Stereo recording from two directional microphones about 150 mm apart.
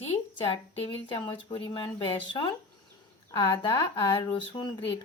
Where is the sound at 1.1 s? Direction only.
30° left (ahead or behind).